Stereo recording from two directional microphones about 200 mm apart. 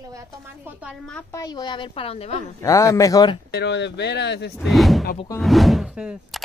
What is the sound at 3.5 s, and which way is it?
Speech, 60° left (ahead or behind).